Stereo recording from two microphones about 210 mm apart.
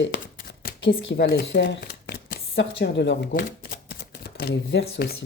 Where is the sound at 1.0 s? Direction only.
60° left (ahead or behind).